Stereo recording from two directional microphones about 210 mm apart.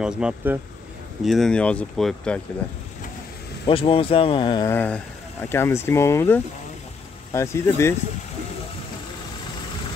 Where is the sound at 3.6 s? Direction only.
25° left (ahead or behind).